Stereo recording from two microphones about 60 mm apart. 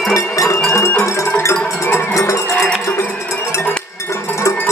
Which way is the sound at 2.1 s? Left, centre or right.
Left.